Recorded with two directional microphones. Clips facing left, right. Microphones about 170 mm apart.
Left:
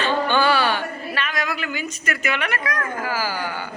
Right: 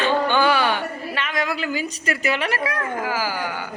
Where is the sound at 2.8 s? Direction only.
15° right (ahead or behind).